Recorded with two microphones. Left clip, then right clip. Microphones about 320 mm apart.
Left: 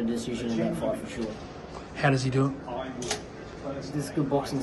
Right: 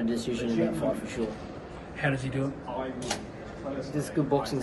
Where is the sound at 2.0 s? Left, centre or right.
Left.